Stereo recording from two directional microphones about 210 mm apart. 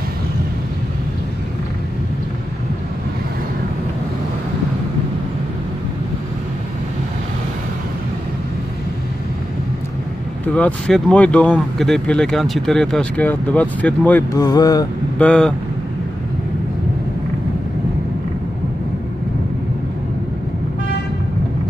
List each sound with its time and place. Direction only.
10.4 s speech: 5° left (ahead or behind)
14.4 s speech: 20° left (ahead or behind)
15.1 s speech: 5° left (ahead or behind)